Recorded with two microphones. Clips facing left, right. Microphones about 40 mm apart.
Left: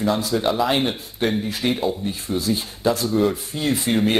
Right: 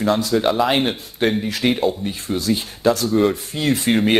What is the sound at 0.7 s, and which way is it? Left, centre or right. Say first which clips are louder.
Speech: right 2 dB; right.